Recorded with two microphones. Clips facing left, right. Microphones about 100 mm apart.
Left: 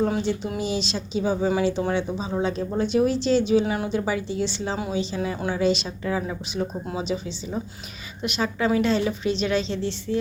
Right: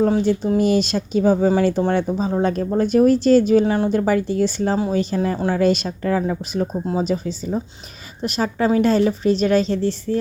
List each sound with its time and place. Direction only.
0.0 s speech: 40° right (ahead or behind)